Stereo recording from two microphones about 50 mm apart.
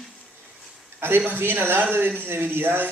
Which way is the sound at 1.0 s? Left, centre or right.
Right.